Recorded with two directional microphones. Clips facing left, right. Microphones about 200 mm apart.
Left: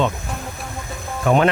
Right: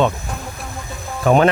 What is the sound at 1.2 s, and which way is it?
Speech, 40° right (ahead or behind).